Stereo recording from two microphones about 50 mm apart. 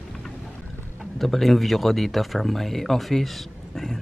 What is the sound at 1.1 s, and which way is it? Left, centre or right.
Speech, centre.